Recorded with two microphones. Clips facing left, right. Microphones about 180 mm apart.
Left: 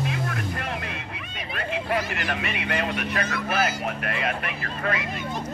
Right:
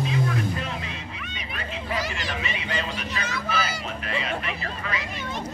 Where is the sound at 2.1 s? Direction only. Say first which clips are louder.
Left 2 dB; 60° left (ahead or behind).